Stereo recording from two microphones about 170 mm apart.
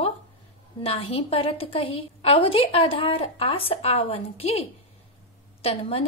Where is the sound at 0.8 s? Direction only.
35° left (ahead or behind).